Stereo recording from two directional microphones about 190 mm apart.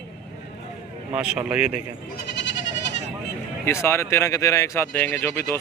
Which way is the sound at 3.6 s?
15° left (ahead or behind).